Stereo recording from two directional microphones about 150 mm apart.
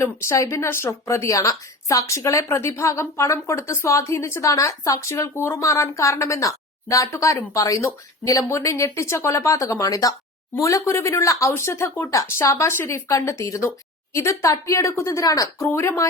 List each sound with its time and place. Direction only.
0.0 s speech: 20° left (ahead or behind)